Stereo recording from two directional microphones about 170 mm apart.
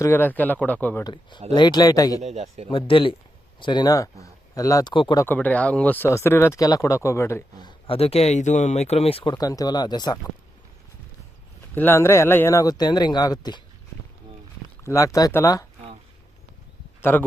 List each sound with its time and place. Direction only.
0.0 s speech: 15° left (ahead or behind)
1.0 s speech: 25° left (ahead or behind)
2.2 s a man's voice: 40° right (ahead or behind)
2.6 s speech: 30° left (ahead or behind)
5.2 s speech: 10° left (ahead or behind)
7.9 s speech: 35° left (ahead or behind)
11.7 s speech: 15° left (ahead or behind)
14.8 s speech: 20° left (ahead or behind)
17.0 s speech: 10° left (ahead or behind)